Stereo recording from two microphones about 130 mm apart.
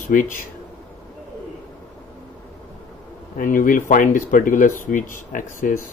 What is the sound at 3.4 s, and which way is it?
Speech, 90° left.